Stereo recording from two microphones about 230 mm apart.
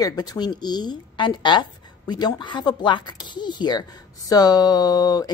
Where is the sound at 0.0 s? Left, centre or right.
Centre.